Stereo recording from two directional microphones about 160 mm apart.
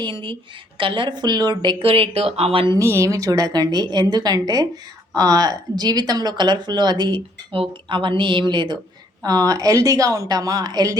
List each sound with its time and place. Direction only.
0.0 s speech: 30° right (ahead or behind)
2.7 s speech: 15° right (ahead or behind)